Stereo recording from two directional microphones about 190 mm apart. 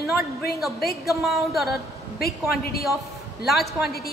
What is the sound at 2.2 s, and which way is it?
Speech, 55° left (ahead or behind).